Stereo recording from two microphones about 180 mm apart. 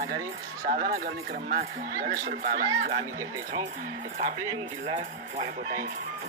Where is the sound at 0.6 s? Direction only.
50° right (ahead or behind).